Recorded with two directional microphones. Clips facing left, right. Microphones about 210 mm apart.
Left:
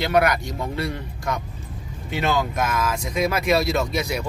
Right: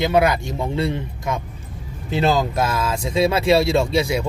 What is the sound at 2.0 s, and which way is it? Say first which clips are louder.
Speech: right 4 dB; 35° right (ahead or behind).